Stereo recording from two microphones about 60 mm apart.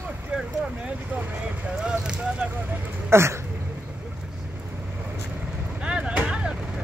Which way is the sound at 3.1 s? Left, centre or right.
Right.